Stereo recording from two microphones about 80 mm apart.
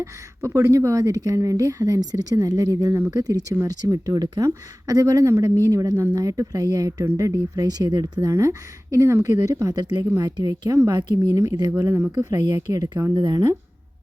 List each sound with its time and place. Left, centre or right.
0.0 s a woman's voice: right
3.9 s a woman's voice: right
9.2 s a woman's voice: right
11.3 s a woman's voice: right
11.8 s speech: right
12.2 s a woman's voice: right